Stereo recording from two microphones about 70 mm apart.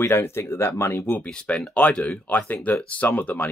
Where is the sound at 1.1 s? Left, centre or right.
Centre.